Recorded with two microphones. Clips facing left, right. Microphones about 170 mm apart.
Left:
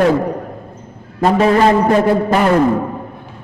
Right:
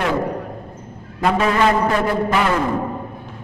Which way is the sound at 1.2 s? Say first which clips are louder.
Left 5 dB; 35° left (ahead or behind).